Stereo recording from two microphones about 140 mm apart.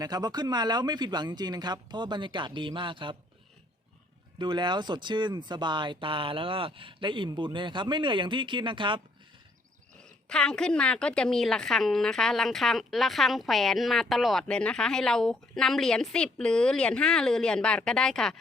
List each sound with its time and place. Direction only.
0.0 s speech: 30° right (ahead or behind)
4.4 s speech: 35° right (ahead or behind)
10.0 s a woman's voice: 5° left (ahead or behind)